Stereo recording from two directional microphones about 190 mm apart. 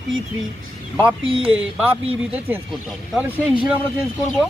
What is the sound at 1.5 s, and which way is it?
Speech, 5° right (ahead or behind).